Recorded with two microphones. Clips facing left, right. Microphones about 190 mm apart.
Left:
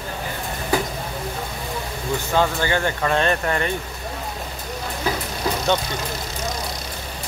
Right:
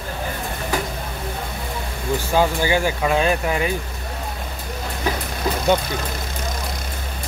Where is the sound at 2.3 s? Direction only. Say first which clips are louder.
Right 2 dB; 10° right (ahead or behind).